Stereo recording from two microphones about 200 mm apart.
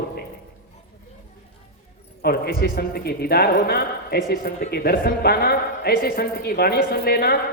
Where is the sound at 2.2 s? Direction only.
50° left (ahead or behind).